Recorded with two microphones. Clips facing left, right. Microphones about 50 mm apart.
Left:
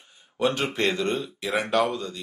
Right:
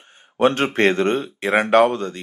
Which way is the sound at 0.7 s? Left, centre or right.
Right.